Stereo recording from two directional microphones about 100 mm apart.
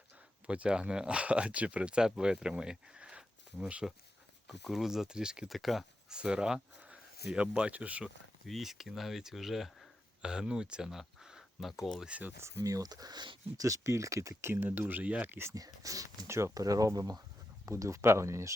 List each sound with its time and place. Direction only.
0.4 s speech: 10° right (ahead or behind)
8.4 s speech: centre (ahead or behind)
12.4 s speech: 30° right (ahead or behind); by 13.4 s 50° right (ahead or behind)
13.6 s speech: 35° right (ahead or behind)
15.5 s speech: 35° right (ahead or behind)